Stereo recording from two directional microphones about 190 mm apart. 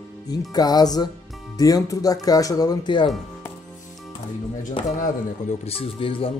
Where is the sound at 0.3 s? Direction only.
20° left (ahead or behind).